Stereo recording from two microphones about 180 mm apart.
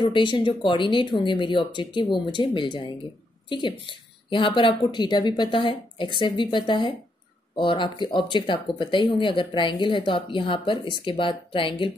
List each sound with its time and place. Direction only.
0.0 s speech: 25° left (ahead or behind)